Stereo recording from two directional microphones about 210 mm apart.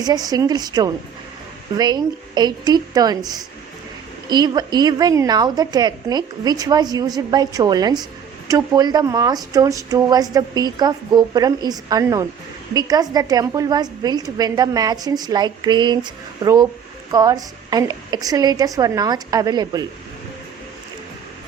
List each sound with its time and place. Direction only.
0.0 s a woman's voice: 20° right (ahead or behind)
4.3 s a woman's voice: 20° right (ahead or behind)